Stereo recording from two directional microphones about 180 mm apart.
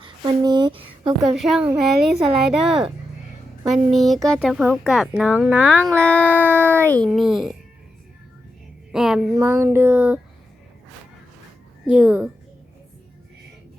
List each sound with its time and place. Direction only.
0.0 s speech: 25° right (ahead or behind)
1.2 s speech: centre (ahead or behind)
5.5 s music: 10° left (ahead or behind)
6.3 s a sound: 10° right (ahead or behind)
6.6 s music: 10° left (ahead or behind)
7.1 s speech: centre (ahead or behind)
8.9 s music: 5° right (ahead or behind)
9.3 s a sound: 15° right (ahead or behind)
11.9 s a sound: 10° right (ahead or behind)